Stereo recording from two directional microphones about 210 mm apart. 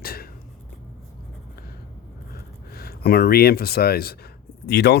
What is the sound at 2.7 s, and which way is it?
Speech, 45° left (ahead or behind).